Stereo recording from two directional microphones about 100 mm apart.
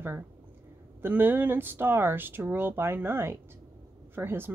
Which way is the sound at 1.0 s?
20° right (ahead or behind).